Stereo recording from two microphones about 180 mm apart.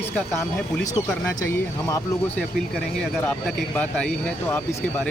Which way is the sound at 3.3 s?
10° left (ahead or behind).